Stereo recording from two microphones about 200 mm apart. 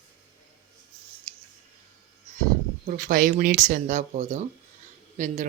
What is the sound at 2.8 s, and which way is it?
Speech, 40° right (ahead or behind).